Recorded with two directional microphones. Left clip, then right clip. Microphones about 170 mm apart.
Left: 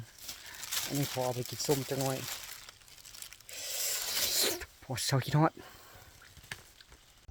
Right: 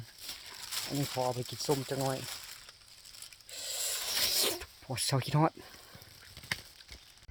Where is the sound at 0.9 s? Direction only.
25° left (ahead or behind).